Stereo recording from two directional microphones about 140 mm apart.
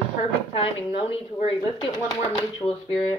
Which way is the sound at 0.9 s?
40° left (ahead or behind).